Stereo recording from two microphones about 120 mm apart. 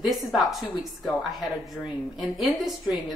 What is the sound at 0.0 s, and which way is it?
A woman's voice, centre (ahead or behind).